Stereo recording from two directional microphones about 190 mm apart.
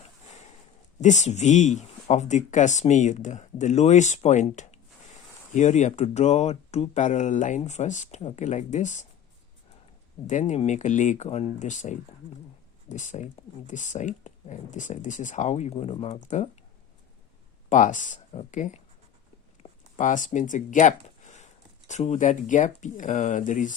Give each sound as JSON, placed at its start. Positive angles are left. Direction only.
{"t": 1.0, "sound": "speech", "side_deg": 40}
{"t": 10.2, "sound": "speech", "side_deg": 40}
{"t": 17.7, "sound": "speech", "side_deg": 40}
{"t": 19.6, "sound": "a sound", "side_deg": 30}
{"t": 20.0, "sound": "speech", "side_deg": 40}